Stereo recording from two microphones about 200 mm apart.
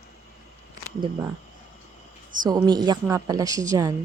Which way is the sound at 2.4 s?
20° right (ahead or behind).